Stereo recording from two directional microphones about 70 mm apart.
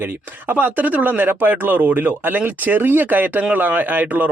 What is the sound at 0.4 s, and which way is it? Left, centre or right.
Speech, right.